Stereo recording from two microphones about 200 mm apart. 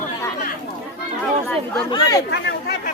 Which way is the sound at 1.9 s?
20° left (ahead or behind).